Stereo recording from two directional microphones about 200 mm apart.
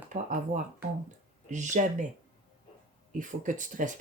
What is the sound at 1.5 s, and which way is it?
Speech, 40° right (ahead or behind).